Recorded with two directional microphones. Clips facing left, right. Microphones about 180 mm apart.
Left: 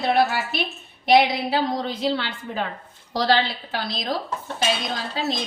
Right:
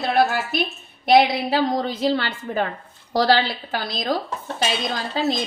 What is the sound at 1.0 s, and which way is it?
A woman's voice, 55° right (ahead or behind).